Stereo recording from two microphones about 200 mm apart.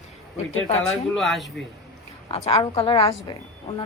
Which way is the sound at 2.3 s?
30° left (ahead or behind).